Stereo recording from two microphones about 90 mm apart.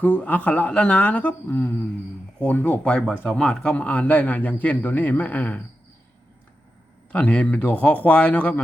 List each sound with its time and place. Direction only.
0.0 s speech: 15° left (ahead or behind)
7.1 s speech: 15° left (ahead or behind)